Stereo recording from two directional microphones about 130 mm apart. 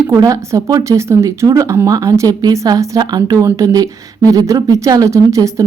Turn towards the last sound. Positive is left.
turn(degrees=-25)  # may be behind; listen again after turning